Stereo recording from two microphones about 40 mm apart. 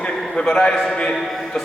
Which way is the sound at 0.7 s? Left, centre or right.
Centre.